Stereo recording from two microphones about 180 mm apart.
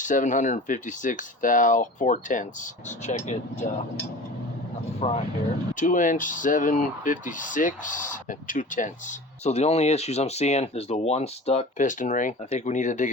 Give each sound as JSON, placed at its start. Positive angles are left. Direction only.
{"t": 0.0, "sound": "speech", "side_deg": 45}
{"t": 4.9, "sound": "speech", "side_deg": 35}
{"t": 5.7, "sound": "speech", "side_deg": 45}